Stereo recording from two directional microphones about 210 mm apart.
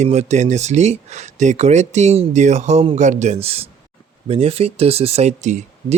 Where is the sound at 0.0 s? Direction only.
30° right (ahead or behind).